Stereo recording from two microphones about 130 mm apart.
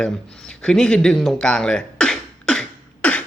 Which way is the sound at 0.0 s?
5° left (ahead or behind).